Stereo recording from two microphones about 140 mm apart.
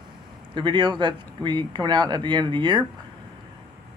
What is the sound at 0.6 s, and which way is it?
Speech, 35° right (ahead or behind).